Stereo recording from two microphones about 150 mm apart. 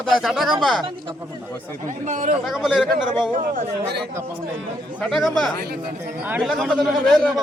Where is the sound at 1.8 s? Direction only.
55° right (ahead or behind).